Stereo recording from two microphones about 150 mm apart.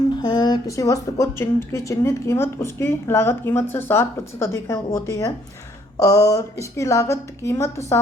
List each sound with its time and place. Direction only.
0.2 s speech: 30° left (ahead or behind)